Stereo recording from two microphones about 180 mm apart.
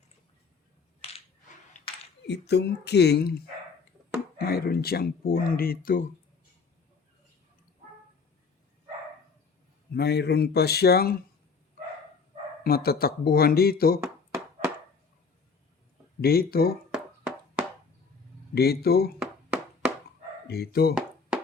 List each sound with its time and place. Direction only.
2.5 s speech: 70° left (ahead or behind)
9.9 s speech: 65° left (ahead or behind)
12.6 s speech: 60° left (ahead or behind)
16.2 s speech: 60° left (ahead or behind)
16.9 s music: 5° right (ahead or behind)
18.5 s speech: 60° left (ahead or behind)
19.2 s a sound: 5° right (ahead or behind)
20.5 s speech: 60° left (ahead or behind)